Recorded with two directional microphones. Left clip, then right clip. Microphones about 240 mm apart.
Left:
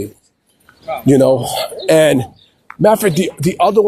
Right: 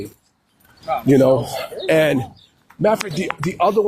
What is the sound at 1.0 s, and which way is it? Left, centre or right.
Speech, left.